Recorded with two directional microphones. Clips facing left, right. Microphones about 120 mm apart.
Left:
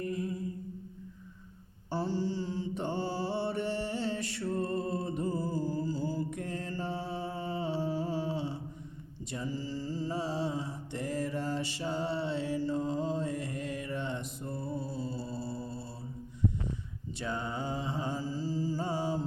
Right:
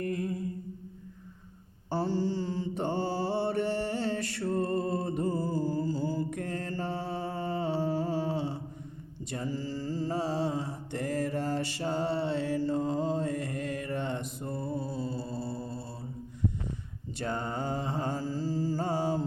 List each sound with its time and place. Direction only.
0.0 s humming: 65° right (ahead or behind)
1.9 s mantra: 60° right (ahead or behind)
17.2 s mantra: 45° right (ahead or behind)